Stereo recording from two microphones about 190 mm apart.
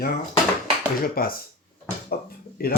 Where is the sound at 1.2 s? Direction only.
50° left (ahead or behind).